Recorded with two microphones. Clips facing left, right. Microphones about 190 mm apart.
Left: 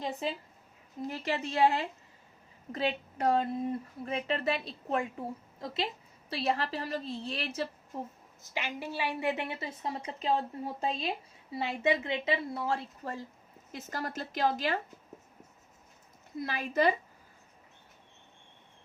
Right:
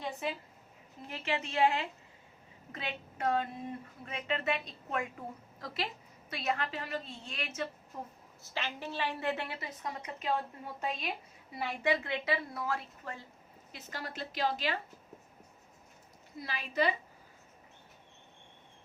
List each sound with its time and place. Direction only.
1.0 s a woman's voice: 35° left (ahead or behind)
8.4 s a woman's voice: 15° left (ahead or behind); by 13.2 s 30° left (ahead or behind)
13.7 s a woman's voice: 45° left (ahead or behind)
16.4 s a woman's voice: 45° left (ahead or behind)